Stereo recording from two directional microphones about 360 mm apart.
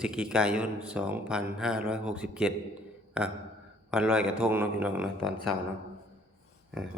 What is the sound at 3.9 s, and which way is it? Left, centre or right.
Speech, centre.